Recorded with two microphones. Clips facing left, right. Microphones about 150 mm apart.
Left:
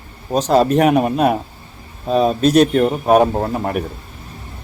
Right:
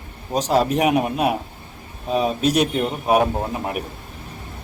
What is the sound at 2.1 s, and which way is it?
Speech, 65° left (ahead or behind).